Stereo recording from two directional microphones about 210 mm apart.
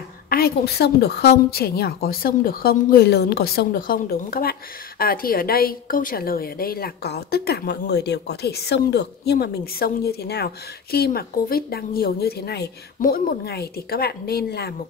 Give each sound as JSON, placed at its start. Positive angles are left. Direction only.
{"t": 0.3, "sound": "a woman's voice", "side_deg": 50}